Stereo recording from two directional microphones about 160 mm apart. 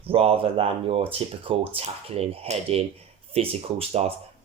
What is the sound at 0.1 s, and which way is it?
Speech, 35° right (ahead or behind).